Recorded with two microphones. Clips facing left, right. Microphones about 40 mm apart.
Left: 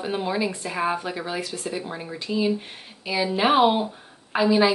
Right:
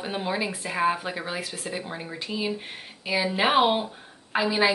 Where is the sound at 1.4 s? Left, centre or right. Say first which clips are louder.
Left 3 dB; right.